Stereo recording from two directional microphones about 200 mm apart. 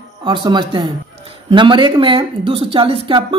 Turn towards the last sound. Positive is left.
turn(degrees=-25)  # may be behind; listen again after turning